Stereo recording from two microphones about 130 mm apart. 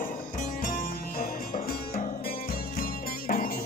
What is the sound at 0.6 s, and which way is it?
Music, 90° left.